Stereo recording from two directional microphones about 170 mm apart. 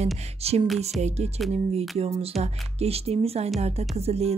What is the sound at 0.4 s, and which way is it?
Music, 35° right (ahead or behind).